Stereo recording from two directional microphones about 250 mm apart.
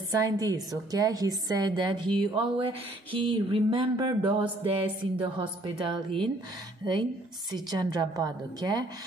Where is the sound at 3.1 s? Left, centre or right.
Centre.